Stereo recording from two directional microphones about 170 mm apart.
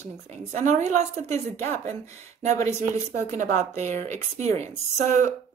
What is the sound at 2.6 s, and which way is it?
A woman's voice, 45° right (ahead or behind).